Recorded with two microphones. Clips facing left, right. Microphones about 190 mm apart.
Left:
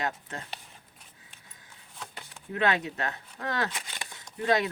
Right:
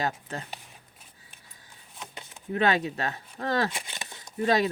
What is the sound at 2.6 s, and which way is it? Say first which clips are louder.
Speech: right 2 dB; 35° right (ahead or behind).